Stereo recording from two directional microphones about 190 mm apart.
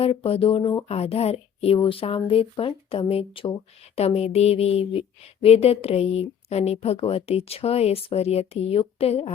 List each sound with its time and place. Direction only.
0.0 s speech: 30° left (ahead or behind)